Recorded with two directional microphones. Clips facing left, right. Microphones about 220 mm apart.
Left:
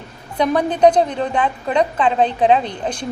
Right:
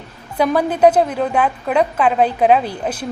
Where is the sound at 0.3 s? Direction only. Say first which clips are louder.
Right 1 dB; 5° right (ahead or behind).